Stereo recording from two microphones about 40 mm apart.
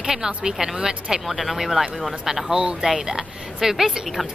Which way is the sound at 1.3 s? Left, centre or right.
Centre.